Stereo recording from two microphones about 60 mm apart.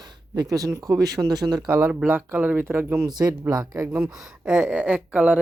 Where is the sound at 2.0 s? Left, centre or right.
Right.